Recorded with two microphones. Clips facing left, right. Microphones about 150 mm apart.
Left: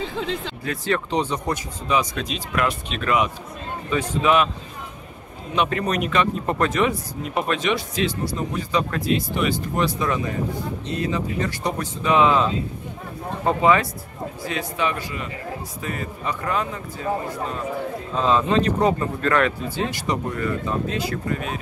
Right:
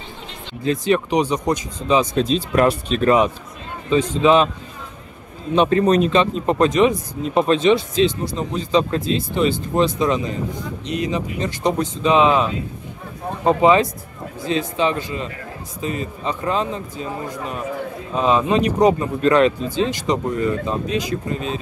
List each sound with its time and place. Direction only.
0.7 s a man's voice: 15° right (ahead or behind); by 3.3 s 35° right (ahead or behind)
3.9 s a man's voice: 20° right (ahead or behind)
5.5 s a man's voice: 30° right (ahead or behind)